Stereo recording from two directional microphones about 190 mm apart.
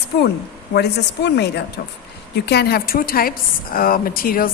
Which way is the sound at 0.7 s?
60° left (ahead or behind).